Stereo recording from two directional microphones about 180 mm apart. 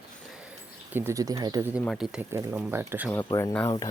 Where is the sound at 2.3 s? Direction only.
10° right (ahead or behind).